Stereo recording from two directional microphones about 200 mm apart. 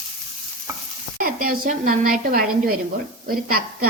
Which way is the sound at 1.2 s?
45° right (ahead or behind).